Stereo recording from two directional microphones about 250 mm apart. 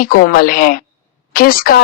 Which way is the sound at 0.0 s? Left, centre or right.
Left.